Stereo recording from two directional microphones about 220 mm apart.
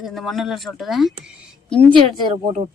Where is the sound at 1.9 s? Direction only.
25° right (ahead or behind).